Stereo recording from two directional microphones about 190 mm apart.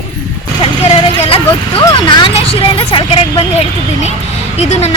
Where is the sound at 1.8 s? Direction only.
25° left (ahead or behind).